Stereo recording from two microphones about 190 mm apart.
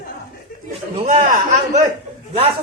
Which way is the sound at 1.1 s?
40° right (ahead or behind).